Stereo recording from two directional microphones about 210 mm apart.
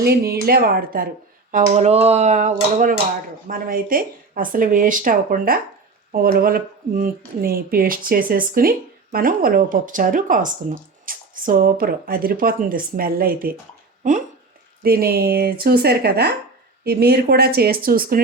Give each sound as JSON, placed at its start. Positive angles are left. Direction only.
{"t": 0.0, "sound": "speech", "side_deg": -45}
{"t": 14.8, "sound": "speech", "side_deg": -45}